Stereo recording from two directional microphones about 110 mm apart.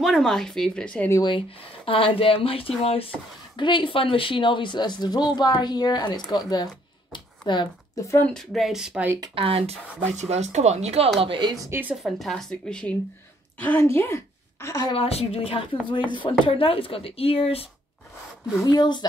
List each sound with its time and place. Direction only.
0.0 s speech: centre (ahead or behind)
1.9 s speech: 55° left (ahead or behind)
3.5 s a woman's voice: 50° left (ahead or behind)
8.2 s speech: 5° left (ahead or behind)
9.3 s speech: 60° right (ahead or behind)
11.1 s speech: 50° right (ahead or behind)
11.9 s a woman's voice: centre (ahead or behind); by 14.9 s 30° left (ahead or behind)
14.9 s speech: 65° left (ahead or behind)
18.6 s a woman's voice: 40° left (ahead or behind)